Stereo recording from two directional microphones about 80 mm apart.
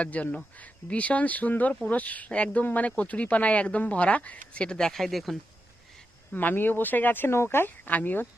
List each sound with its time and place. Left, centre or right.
0.0 s speech: centre
6.3 s speech: left